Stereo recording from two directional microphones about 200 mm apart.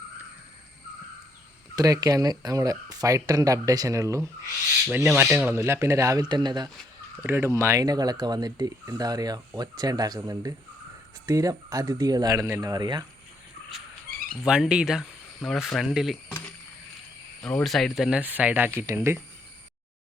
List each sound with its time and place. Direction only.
1.7 s speech: 15° right (ahead or behind)
14.4 s speech: 5° right (ahead or behind)
17.4 s speech: centre (ahead or behind)